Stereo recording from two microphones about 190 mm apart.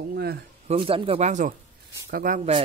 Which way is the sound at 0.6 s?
30° right (ahead or behind).